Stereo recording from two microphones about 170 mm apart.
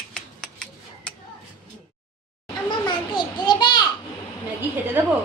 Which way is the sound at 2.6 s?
25° left (ahead or behind).